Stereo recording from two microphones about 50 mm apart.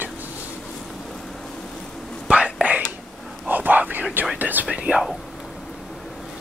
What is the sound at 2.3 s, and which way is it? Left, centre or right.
Whispering, right.